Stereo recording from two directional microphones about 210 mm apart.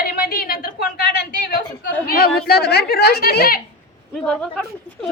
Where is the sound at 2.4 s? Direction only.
50° left (ahead or behind).